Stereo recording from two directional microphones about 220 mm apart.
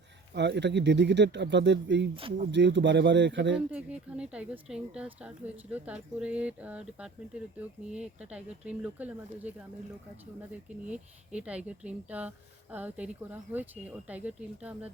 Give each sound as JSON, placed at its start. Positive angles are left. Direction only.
{"t": 0.3, "sound": "speech", "side_deg": -50}
{"t": 3.7, "sound": "speech", "side_deg": -5}
{"t": 11.3, "sound": "speech", "side_deg": -5}